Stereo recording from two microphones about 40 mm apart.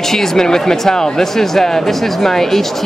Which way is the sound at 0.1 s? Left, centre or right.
Centre.